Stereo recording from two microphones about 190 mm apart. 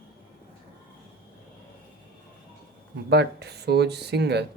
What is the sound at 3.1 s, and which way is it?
Speech, 60° right (ahead or behind).